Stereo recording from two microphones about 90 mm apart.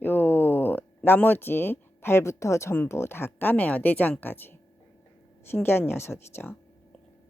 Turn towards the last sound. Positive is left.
turn(degrees=25)  # may be behind; listen again after turning